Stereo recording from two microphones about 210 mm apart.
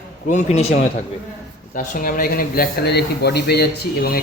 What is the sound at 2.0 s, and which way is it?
Speech, 45° left (ahead or behind).